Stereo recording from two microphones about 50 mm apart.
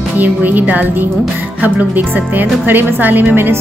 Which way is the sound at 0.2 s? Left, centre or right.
Right.